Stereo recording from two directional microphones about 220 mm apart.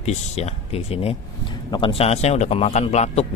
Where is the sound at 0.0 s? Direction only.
30° left (ahead or behind).